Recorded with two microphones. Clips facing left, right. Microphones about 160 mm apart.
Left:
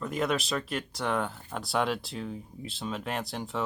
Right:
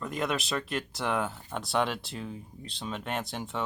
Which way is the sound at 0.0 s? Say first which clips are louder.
Left 2 dB; centre (ahead or behind).